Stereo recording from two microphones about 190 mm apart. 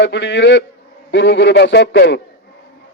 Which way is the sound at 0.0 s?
70° left (ahead or behind).